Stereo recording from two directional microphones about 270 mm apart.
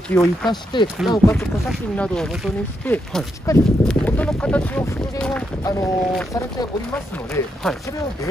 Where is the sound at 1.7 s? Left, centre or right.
Centre.